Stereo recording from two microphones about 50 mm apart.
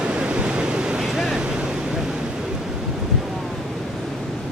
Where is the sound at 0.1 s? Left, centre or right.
Centre.